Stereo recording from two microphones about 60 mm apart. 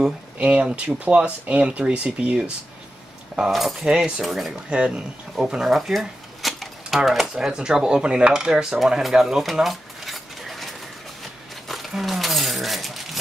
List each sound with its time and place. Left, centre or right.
0.4 s speech: centre
3.8 s speech: centre
4.6 s speech: centre
5.9 s a sound: centre
7.0 s speech: centre
7.3 s cutlery: centre
11.6 s a sound: centre